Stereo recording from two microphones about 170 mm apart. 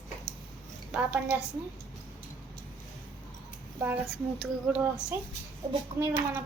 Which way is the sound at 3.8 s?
10° right (ahead or behind).